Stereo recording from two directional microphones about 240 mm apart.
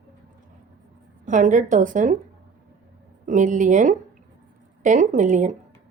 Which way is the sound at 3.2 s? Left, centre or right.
Right.